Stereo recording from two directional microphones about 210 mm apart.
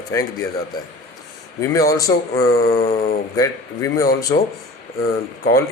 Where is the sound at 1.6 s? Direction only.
15° left (ahead or behind).